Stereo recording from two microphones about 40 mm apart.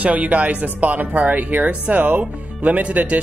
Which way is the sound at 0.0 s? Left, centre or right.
Right.